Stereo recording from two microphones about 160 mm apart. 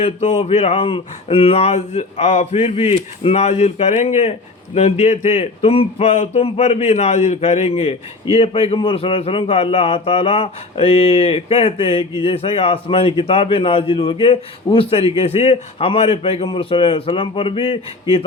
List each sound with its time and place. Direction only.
0.0 s speech: 40° left (ahead or behind)